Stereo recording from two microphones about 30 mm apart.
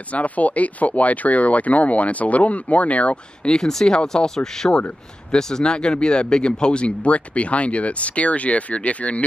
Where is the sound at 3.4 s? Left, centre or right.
Left.